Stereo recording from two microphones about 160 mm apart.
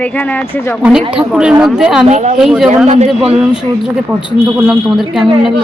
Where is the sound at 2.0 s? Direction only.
45° right (ahead or behind).